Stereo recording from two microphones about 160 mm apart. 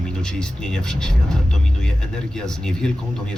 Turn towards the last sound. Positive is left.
turn(degrees=5)  # may be behind; listen again after turning